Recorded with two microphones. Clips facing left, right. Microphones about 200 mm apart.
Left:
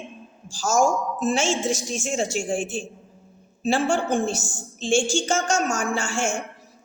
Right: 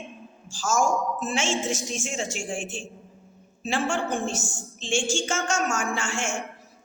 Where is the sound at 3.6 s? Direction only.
35° left (ahead or behind).